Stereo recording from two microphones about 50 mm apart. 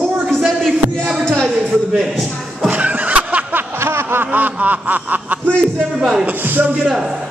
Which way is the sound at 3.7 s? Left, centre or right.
Right.